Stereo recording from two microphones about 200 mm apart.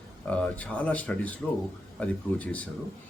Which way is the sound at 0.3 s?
5° left (ahead or behind).